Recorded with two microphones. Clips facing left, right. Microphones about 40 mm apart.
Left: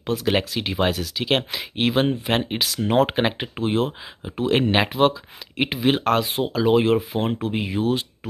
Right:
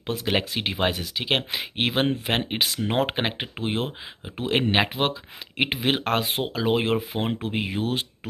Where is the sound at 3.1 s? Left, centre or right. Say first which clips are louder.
Left 4 dB; centre.